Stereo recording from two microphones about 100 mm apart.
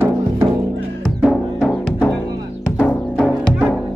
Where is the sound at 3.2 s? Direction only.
Centre (ahead or behind).